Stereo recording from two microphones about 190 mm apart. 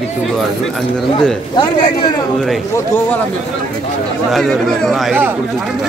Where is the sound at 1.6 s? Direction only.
20° left (ahead or behind).